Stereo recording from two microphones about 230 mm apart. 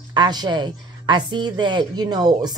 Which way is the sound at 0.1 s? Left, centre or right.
Centre.